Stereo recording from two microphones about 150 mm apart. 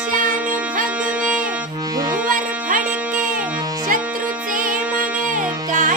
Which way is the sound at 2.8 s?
10° right (ahead or behind).